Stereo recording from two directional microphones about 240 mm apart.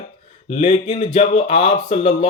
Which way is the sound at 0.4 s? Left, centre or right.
Left.